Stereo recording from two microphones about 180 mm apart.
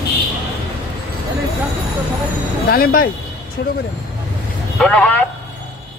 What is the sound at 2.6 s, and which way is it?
Speech, 55° left (ahead or behind).